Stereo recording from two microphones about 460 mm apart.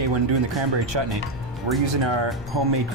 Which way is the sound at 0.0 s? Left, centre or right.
Right.